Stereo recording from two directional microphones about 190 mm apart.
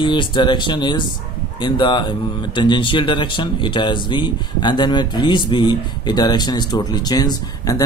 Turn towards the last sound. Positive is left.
turn(degrees=20)  # may be behind; listen again after turning